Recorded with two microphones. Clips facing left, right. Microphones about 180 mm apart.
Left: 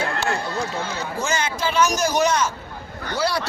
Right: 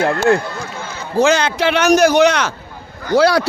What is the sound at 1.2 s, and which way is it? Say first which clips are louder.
A man's voice: right 11 dB; 75° right (ahead or behind).